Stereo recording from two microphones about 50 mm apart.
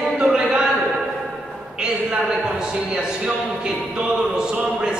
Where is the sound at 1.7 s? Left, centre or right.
Centre.